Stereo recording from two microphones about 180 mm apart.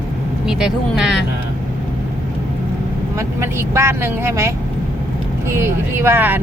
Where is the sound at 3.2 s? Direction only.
15° right (ahead or behind).